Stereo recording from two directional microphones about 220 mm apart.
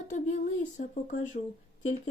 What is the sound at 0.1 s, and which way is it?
Speech, 35° left (ahead or behind).